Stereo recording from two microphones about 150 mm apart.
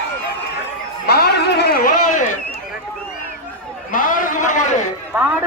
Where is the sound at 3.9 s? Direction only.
65° left (ahead or behind).